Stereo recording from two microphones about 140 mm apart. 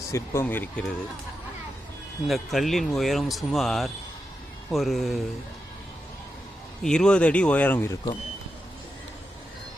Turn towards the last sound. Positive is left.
turn(degrees=15)  # may be behind; listen again after turning